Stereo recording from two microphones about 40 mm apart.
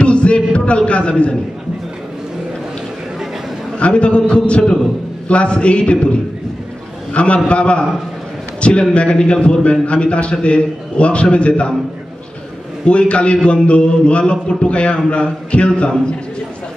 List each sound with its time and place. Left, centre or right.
0.0 s a sound: left
3.8 s a man's voice: left
7.2 s a man's voice: left
12.8 s a man's voice: left